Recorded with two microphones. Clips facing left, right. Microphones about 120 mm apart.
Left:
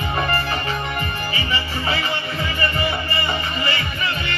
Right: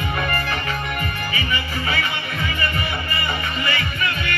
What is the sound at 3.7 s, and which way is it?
Music, 30° left (ahead or behind).